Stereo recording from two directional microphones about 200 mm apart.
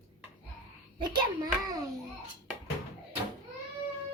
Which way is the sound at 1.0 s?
20° right (ahead or behind).